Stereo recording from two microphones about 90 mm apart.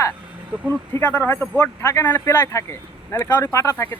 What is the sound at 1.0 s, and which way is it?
A man's voice, 20° left (ahead or behind).